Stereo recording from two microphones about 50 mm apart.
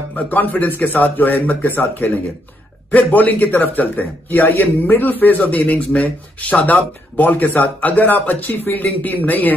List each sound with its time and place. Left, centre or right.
0.1 s a man's voice: left
2.9 s a man's voice: left